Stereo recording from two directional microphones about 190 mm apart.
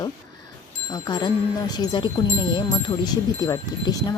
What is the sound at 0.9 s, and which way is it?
Speech, 20° left (ahead or behind).